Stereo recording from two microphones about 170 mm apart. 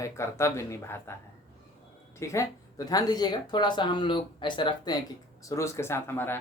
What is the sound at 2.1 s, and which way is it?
Speech, 15° left (ahead or behind).